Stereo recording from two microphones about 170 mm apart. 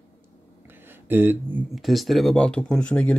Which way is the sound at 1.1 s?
10° right (ahead or behind).